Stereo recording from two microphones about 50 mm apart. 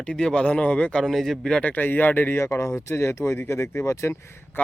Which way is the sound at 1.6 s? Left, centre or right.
Left.